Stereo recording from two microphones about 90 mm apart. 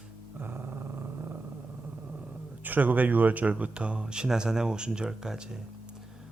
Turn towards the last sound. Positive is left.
turn(degrees=-10)  # may be behind; listen again after turning